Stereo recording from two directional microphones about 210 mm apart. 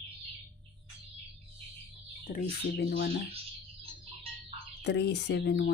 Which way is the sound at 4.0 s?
25° right (ahead or behind).